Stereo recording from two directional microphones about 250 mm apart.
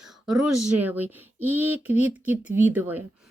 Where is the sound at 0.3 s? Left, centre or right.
Right.